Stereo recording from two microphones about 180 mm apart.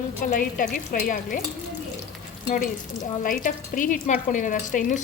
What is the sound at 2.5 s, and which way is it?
A woman's voice, 50° left (ahead or behind).